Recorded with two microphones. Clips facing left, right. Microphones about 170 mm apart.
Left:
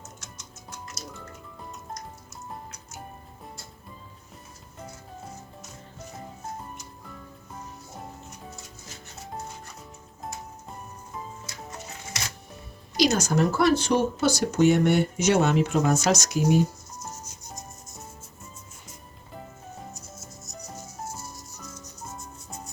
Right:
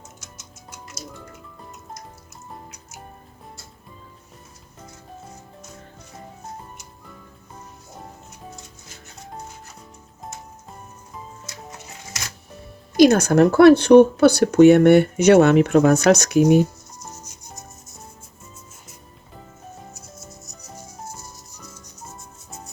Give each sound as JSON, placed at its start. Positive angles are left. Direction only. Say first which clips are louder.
{"t": 13.0, "sound": "speech", "louder": "right 9 dB", "side_deg": -55}